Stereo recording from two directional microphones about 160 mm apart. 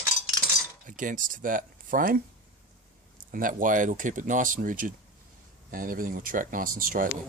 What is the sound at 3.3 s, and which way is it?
Speech, 55° right (ahead or behind).